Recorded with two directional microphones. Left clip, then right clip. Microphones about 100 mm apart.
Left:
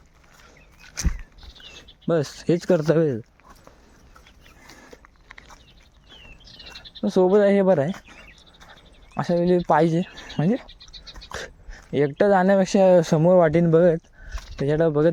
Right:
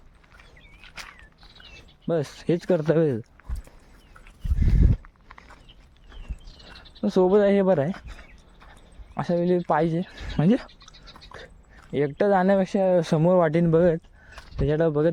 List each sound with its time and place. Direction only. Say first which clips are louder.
0.8 s a sound: left 6 dB; 45° left (ahead or behind)
2.0 s speech: left 3 dB; 20° left (ahead or behind)
2.8 s speech: left 2 dB; 5° left (ahead or behind)
6.6 s a sound: left 1 dB; 10° right (ahead or behind)
7.1 s speech: left 2 dB; centre (ahead or behind)
8.6 s a sound: left 2 dB; 15° left (ahead or behind)
9.6 s speech: left 4 dB; 25° left (ahead or behind)
10.4 s speech: right 1 dB; centre (ahead or behind)
11.3 s a sound: left 12 dB; 55° left (ahead or behind)
11.9 s speech: left 3 dB; 20° left (ahead or behind)
12.6 s speech: left 6 dB; 35° left (ahead or behind)
13.0 s speech: left 4 dB; 15° left (ahead or behind)